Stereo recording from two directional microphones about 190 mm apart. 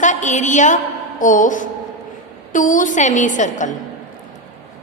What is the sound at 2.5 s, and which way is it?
A woman's voice, 45° left (ahead or behind).